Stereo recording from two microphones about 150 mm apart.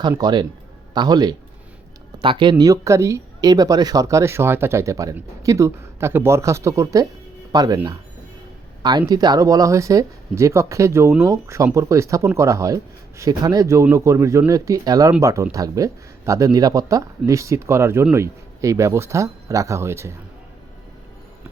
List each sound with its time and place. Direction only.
0.2 s speech: 30° right (ahead or behind)
8.8 s speech: 30° right (ahead or behind)